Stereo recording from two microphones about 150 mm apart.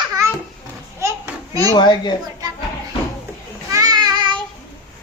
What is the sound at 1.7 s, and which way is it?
Speech, 30° left (ahead or behind).